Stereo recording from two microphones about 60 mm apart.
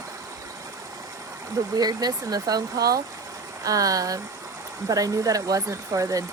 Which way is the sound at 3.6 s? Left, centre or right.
Right.